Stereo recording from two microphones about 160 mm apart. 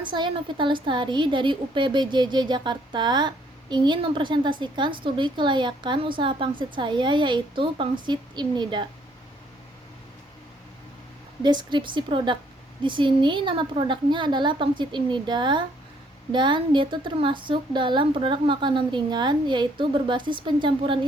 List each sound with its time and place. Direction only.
0.0 s a woman's voice: 30° right (ahead or behind)
11.4 s a woman's voice: 30° right (ahead or behind)